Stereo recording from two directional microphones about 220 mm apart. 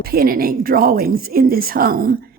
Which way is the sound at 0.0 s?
45° right (ahead or behind).